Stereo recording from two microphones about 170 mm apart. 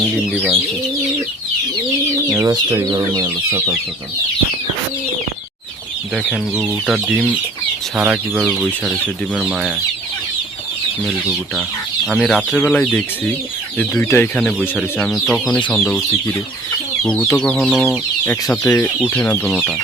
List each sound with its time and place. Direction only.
0.0 s speech: centre (ahead or behind)
2.3 s speech: 20° right (ahead or behind)
6.1 s speech: centre (ahead or behind)
11.0 s speech: centre (ahead or behind)
18.5 s speech: 10° left (ahead or behind)